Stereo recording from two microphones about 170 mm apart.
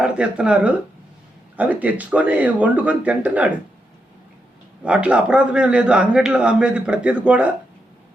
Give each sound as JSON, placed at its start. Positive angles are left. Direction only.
{"t": 0.0, "sound": "a man's voice", "side_deg": -5}
{"t": 4.8, "sound": "a man's voice", "side_deg": -5}